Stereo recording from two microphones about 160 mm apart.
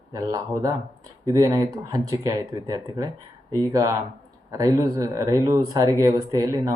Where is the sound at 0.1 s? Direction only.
20° right (ahead or behind).